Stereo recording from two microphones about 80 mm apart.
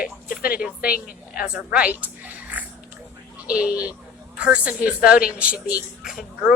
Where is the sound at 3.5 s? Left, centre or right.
Centre.